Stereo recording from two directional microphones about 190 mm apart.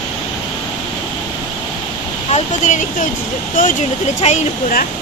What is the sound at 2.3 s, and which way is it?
Speech, 40° left (ahead or behind).